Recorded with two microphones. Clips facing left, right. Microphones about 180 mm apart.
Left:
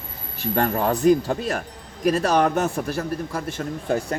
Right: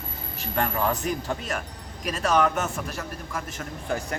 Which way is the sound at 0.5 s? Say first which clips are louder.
Left 4 dB; 35° left (ahead or behind).